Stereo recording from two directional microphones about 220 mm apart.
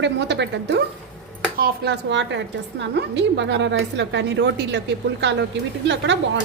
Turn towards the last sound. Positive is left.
turn(degrees=-55)  # may be behind; listen again after turning